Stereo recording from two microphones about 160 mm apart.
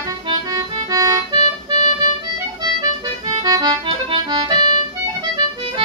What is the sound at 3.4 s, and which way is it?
Accordion, 25° right (ahead or behind).